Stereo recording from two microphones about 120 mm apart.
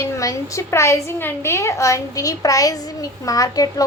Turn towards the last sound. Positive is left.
turn(degrees=30)  # may be behind; listen again after turning